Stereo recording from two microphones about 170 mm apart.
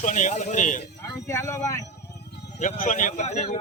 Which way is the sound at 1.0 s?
15° left (ahead or behind).